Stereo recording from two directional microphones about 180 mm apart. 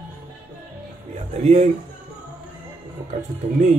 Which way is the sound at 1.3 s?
35° right (ahead or behind).